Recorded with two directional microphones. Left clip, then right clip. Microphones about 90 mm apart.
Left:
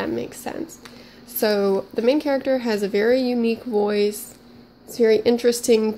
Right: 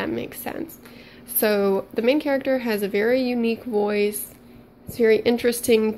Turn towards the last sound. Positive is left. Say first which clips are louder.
# left 2 dB
turn(degrees=25)  # may be behind; listen again after turning